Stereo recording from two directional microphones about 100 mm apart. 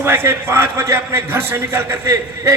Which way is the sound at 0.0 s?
20° right (ahead or behind).